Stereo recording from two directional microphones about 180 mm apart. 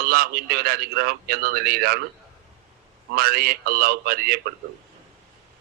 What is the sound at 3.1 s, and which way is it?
A man's voice, 55° right (ahead or behind).